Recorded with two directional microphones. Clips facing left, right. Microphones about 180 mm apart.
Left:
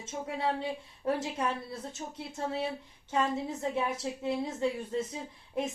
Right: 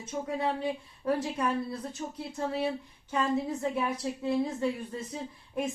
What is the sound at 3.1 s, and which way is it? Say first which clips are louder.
A woman's voice: right 2 dB; 25° left (ahead or behind).